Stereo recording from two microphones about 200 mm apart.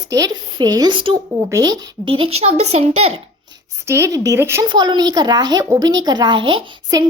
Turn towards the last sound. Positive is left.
turn(degrees=-25)  # may be behind; listen again after turning